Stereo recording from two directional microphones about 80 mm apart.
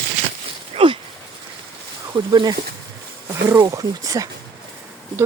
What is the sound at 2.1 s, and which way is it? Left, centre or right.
Speech, right.